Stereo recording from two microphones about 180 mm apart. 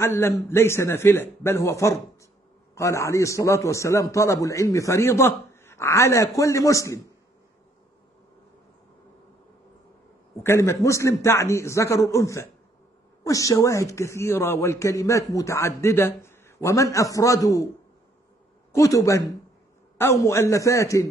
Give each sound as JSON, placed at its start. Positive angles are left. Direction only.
{"t": 0.0, "sound": "a woman's voice", "side_deg": 15}
{"t": 10.4, "sound": "a woman's voice", "side_deg": 15}
{"t": 18.7, "sound": "a woman's voice", "side_deg": 20}